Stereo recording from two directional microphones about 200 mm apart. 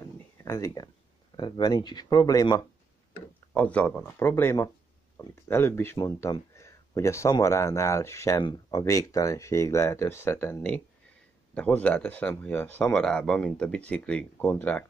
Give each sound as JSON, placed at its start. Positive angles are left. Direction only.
{"t": 0.4, "sound": "speech", "side_deg": 15}
{"t": 3.5, "sound": "speech", "side_deg": 5}